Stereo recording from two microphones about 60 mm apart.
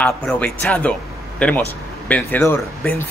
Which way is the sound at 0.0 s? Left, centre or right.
Left.